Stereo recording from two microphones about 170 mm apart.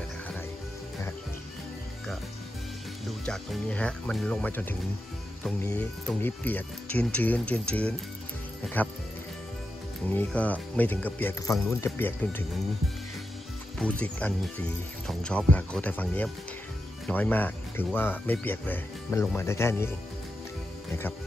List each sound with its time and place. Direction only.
3.3 s speech: 5° left (ahead or behind)
10.0 s speech: 10° left (ahead or behind)
13.7 s speech: 5° left (ahead or behind)